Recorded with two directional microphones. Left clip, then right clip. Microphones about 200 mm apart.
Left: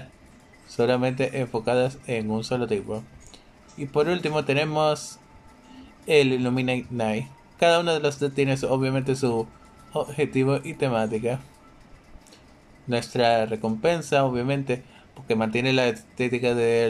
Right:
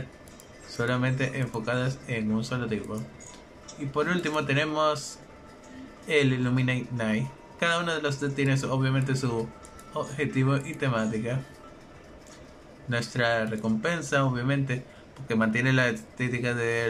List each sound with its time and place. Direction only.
0.7 s speech: 20° left (ahead or behind)
3.9 s speech: 20° left (ahead or behind)
6.0 s speech: 20° left (ahead or behind)
12.9 s speech: 20° left (ahead or behind)